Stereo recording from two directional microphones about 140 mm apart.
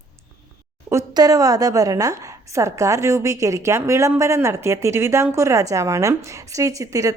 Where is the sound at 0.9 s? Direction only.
25° right (ahead or behind).